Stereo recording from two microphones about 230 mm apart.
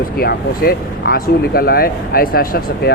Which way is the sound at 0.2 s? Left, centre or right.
Left.